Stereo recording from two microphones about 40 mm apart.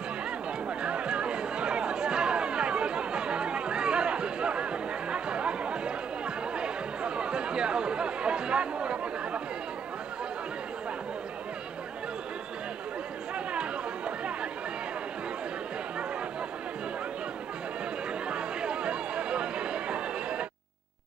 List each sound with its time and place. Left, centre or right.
0.7 s music: right
13.5 s chatter: right
18.3 s music: right